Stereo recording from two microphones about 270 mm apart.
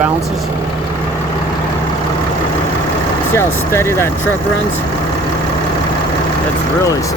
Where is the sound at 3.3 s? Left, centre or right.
Centre.